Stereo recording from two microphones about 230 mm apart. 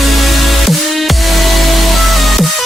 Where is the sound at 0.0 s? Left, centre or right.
Centre.